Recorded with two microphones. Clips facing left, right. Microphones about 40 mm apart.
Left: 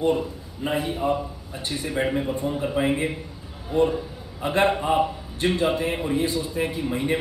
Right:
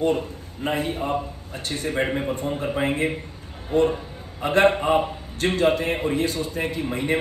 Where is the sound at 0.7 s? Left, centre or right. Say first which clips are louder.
Left 1 dB; right.